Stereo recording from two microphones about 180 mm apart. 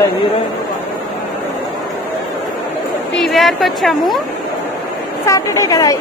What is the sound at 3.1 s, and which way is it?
A woman's voice, centre (ahead or behind).